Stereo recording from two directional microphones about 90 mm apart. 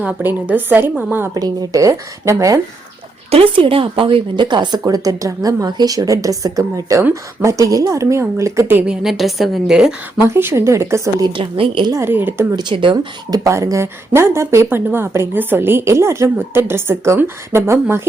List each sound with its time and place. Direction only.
0.0 s a woman's voice: 20° right (ahead or behind)
1.3 s a woman's voice: 40° right (ahead or behind)
3.3 s a woman's voice: 80° right; by 4.8 s 55° right (ahead or behind)
4.8 s a woman's voice: 40° right (ahead or behind)
8.9 s a woman's voice: centre (ahead or behind)
10.2 s a woman's voice: 30° right (ahead or behind)
11.3 s a woman's voice: 80° right
12.0 s a woman's voice: 25° right (ahead or behind)
12.5 s speech: 65° right (ahead or behind)
13.3 s a woman's voice: 35° right (ahead or behind)